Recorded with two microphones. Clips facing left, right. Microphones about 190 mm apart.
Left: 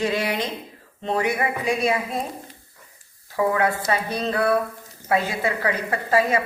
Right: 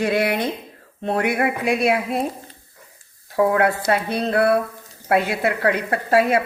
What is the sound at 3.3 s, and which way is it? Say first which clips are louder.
A woman's voice: right 4 dB; 60° right (ahead or behind).